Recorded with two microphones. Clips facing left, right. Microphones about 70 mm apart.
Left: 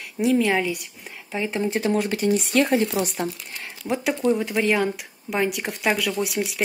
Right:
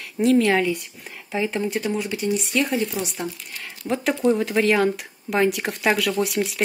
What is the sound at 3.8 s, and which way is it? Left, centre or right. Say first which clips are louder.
Speech: right 2 dB; centre.